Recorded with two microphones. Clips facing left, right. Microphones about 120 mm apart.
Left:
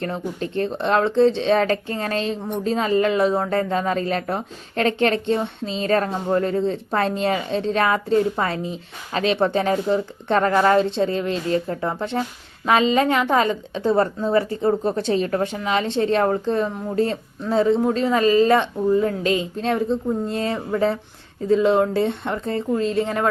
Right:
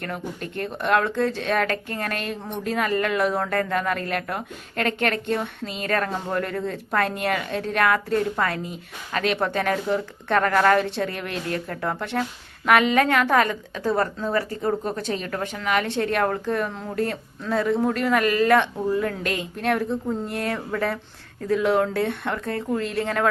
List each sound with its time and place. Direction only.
0.0 s speech: 25° left (ahead or behind)
19.2 s a woman's voice: 60° right (ahead or behind)
19.6 s speech: 20° left (ahead or behind)